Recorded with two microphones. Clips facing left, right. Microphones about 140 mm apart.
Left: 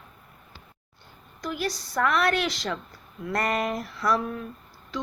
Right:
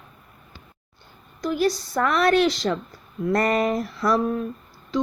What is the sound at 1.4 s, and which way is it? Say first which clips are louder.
Speech: right 8 dB; 35° right (ahead or behind).